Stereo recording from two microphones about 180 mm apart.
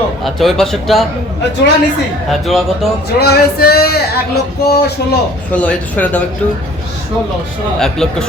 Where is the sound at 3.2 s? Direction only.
60° left (ahead or behind).